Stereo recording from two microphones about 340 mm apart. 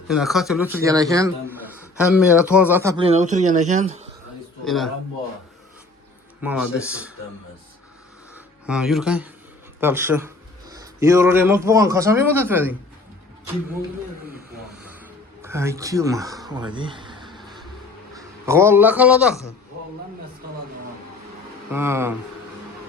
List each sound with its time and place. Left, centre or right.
0.1 s a man's voice: centre
4.6 s speech: centre
6.4 s speech: centre
8.6 s a man's voice: centre
14.8 s a sound: centre
18.1 s a man's voice: centre
21.7 s speech: centre